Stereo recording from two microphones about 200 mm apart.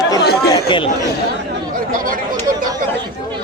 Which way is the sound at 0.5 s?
25° left (ahead or behind).